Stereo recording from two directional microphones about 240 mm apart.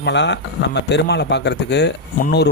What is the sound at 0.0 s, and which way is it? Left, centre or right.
Speech, left.